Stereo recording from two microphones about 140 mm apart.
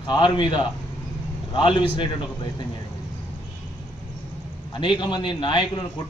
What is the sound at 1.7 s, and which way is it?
Speech, 35° left (ahead or behind).